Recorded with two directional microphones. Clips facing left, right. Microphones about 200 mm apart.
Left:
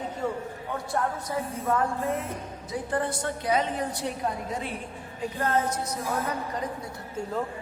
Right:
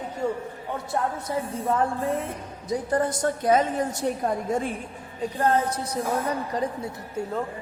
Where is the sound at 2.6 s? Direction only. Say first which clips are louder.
Right 5 dB; 40° right (ahead or behind).